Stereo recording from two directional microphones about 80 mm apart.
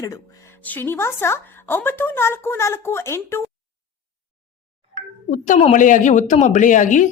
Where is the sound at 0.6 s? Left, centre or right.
Left.